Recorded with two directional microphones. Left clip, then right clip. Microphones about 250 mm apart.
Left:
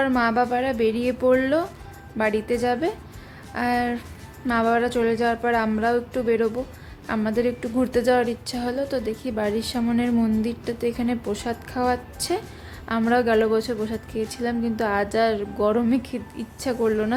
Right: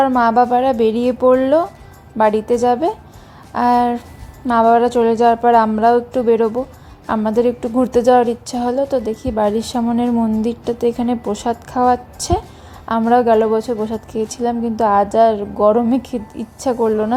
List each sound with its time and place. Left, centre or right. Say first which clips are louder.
0.0 s a woman's voice: right 8 dB; centre